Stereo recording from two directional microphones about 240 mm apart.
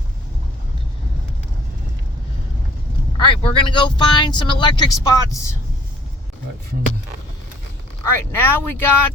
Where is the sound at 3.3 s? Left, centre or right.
Left.